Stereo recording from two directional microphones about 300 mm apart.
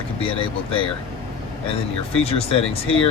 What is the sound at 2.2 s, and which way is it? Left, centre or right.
Speech, centre.